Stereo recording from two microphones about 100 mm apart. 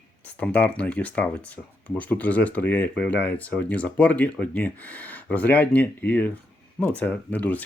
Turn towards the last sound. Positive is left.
turn(degrees=15)  # may be behind; listen again after turning